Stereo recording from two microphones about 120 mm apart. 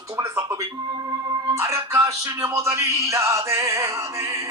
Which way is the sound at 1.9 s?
25° right (ahead or behind).